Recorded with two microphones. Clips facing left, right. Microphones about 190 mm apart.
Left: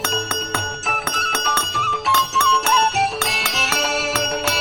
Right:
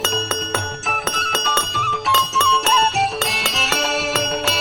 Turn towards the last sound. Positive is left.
turn(degrees=0)  # may be behind; listen again after turning